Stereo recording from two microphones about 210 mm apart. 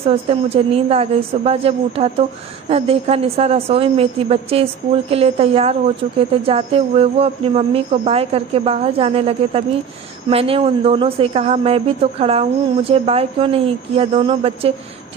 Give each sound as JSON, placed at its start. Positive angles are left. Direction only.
{"t": 0.0, "sound": "speech", "side_deg": -25}